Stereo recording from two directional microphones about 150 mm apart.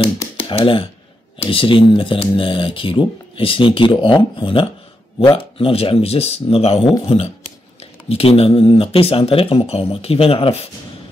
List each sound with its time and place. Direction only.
0.4 s speech: 35° left (ahead or behind)